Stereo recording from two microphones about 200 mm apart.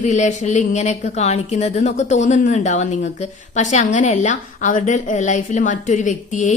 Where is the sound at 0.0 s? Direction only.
35° left (ahead or behind).